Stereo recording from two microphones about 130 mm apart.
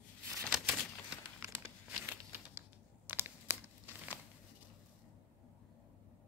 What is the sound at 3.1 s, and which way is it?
Crumpling, 15° right (ahead or behind).